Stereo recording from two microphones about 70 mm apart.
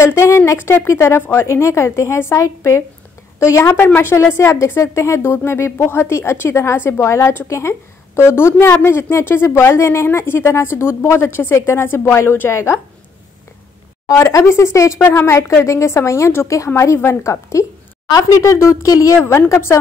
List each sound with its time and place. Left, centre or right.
0.0 s a woman's voice: left
3.7 s speech: left
14.0 s a woman's voice: left
19.5 s speech: left